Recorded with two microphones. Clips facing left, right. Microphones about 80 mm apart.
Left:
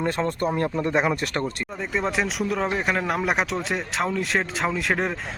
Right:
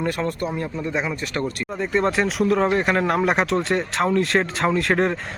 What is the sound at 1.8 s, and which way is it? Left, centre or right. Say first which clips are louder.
Speech: right 5 dB; centre.